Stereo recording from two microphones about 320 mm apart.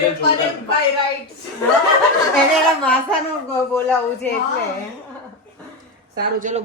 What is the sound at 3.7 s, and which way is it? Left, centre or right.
Speech, centre.